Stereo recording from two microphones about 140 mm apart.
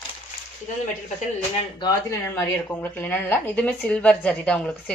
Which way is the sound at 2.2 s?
15° left (ahead or behind).